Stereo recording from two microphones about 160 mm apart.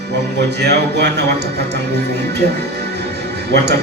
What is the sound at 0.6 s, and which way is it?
Speech, 90° right.